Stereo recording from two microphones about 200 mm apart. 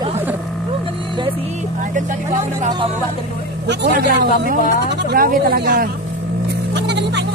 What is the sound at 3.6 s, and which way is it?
Speech, 55° right (ahead or behind).